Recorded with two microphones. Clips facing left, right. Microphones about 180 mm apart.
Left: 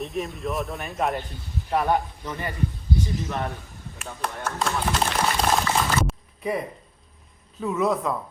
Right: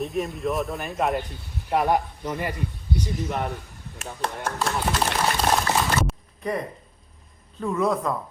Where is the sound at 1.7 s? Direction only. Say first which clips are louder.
Right 1 dB; 20° right (ahead or behind).